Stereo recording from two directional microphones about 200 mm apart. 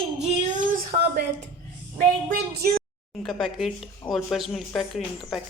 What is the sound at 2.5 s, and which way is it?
Speech, 50° right (ahead or behind).